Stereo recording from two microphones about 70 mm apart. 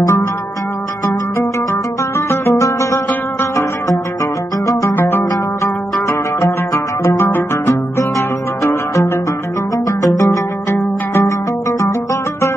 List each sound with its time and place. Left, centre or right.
2.1 s music: left
5.6 s music: left
8.6 s music: left